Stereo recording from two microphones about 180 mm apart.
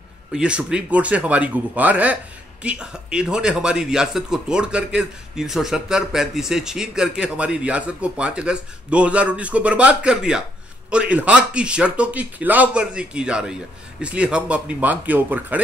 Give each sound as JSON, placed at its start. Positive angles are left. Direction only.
{"t": 0.3, "sound": "a man's voice", "side_deg": -5}